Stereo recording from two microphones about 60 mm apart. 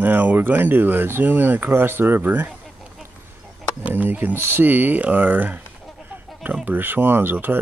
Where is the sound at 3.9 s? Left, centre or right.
Right.